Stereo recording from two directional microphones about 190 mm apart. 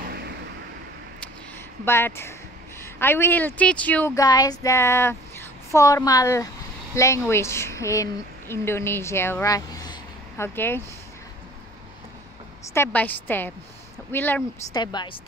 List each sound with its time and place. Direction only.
1.9 s a woman's voice: 10° left (ahead or behind)
12.7 s speech: 10° left (ahead or behind)
14.7 s speech: 20° left (ahead or behind)